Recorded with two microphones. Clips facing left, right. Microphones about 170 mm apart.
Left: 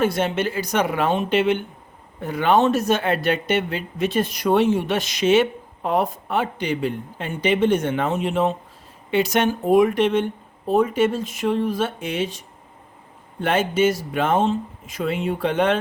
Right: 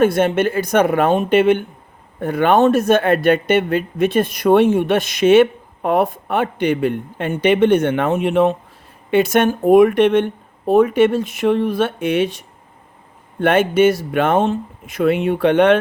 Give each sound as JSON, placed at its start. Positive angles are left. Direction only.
{"t": 0.0, "sound": "speech", "side_deg": -55}